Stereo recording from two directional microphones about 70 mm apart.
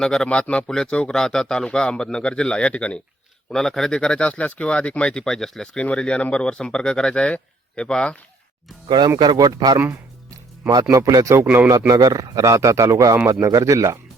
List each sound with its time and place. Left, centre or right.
0.0 s speech: centre
3.5 s speech: centre
8.9 s speech: right
9.7 s speech: right
10.9 s a man's voice: right